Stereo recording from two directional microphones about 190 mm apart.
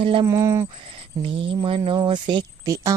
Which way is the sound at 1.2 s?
25° right (ahead or behind).